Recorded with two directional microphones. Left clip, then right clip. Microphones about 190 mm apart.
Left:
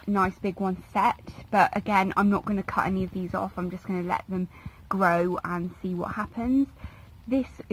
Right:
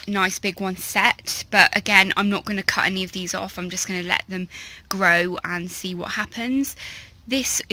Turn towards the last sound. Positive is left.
turn(degrees=-20)  # may be behind; listen again after turning